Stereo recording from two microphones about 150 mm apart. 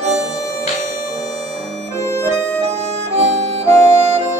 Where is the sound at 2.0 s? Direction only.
20° left (ahead or behind).